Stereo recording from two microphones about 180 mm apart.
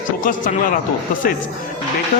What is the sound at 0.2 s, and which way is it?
Speech, 50° left (ahead or behind).